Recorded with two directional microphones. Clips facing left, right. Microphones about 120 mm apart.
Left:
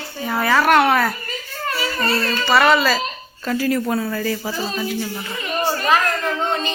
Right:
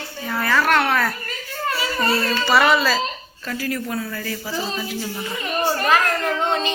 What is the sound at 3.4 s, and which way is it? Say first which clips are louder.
Speech: left 6 dB; 25° left (ahead or behind).